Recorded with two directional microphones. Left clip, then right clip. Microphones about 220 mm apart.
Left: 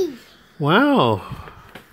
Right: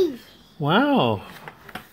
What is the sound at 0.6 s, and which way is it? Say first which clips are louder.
Speech: left 4 dB; 25° left (ahead or behind).